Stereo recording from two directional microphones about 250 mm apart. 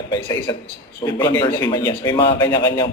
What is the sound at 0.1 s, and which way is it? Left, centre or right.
A man's voice, centre.